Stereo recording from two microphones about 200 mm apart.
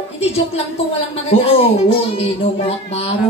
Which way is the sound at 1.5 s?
30° left (ahead or behind).